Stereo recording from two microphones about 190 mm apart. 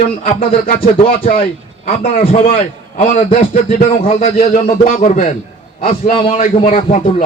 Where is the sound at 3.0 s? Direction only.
45° left (ahead or behind).